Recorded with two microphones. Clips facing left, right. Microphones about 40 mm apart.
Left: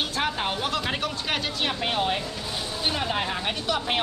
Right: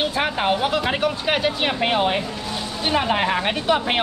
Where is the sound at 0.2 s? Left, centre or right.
Right.